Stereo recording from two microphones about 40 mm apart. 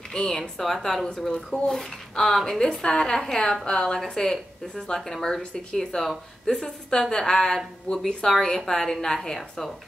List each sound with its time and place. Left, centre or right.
0.1 s speech: centre
5.4 s speech: left
5.9 s speech: centre